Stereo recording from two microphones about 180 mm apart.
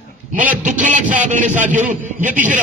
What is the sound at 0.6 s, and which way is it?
A man's voice, 45° right (ahead or behind).